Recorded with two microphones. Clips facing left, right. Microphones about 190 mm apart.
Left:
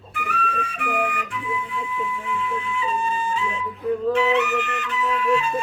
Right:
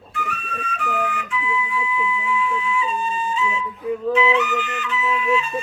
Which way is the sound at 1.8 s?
55° left (ahead or behind).